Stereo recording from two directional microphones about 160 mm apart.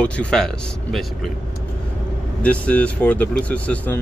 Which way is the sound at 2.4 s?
10° left (ahead or behind).